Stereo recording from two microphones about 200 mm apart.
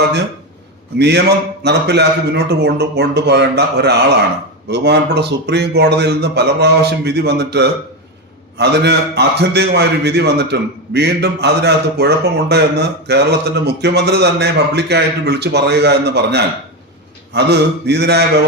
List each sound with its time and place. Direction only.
0.9 s a man's voice: 55° right (ahead or behind)